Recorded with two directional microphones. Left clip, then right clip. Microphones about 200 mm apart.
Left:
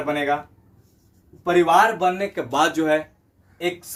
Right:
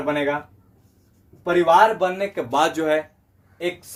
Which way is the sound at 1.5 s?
15° right (ahead or behind).